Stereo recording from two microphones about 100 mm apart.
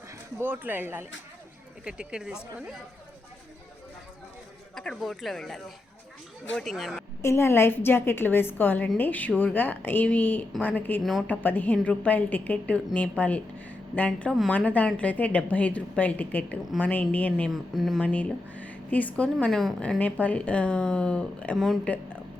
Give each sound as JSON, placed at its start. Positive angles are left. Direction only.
{"t": 0.3, "sound": "speech", "side_deg": -20}
{"t": 1.8, "sound": "speech", "side_deg": -10}
{"t": 4.7, "sound": "speech", "side_deg": 5}
{"t": 7.2, "sound": "a woman's voice", "side_deg": 25}
{"t": 11.0, "sound": "speech", "side_deg": 0}
{"t": 11.3, "sound": "a woman's voice", "side_deg": 20}
{"t": 17.5, "sound": "speech", "side_deg": 0}
{"t": 18.0, "sound": "a woman's voice", "side_deg": 15}
{"t": 20.0, "sound": "a woman's voice", "side_deg": 15}